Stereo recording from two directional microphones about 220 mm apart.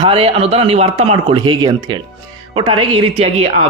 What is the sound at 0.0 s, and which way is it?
Speech, 25° right (ahead or behind).